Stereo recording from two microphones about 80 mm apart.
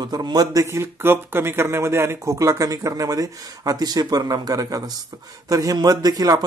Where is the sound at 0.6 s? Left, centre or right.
Right.